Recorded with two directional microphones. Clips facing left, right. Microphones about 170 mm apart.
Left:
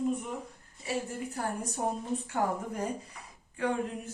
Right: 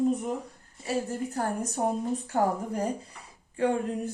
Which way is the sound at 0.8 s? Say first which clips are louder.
Right 4 dB; 45° right (ahead or behind).